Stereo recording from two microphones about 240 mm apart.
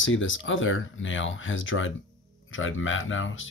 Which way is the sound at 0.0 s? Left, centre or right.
Left.